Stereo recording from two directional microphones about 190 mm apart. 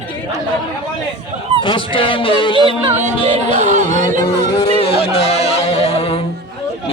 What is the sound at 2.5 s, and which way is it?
Music, 30° right (ahead or behind).